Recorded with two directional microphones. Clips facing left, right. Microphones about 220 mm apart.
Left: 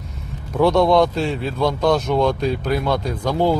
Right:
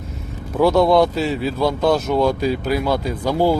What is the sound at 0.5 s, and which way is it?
Speech, 5° right (ahead or behind).